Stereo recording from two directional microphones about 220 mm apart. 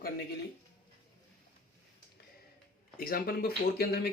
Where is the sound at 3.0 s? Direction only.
45° left (ahead or behind).